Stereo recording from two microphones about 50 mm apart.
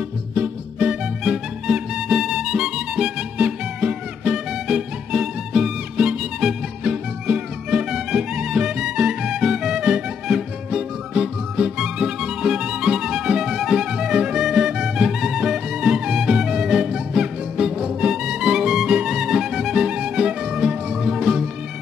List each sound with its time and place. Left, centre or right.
0.3 s music: right
0.8 s music: centre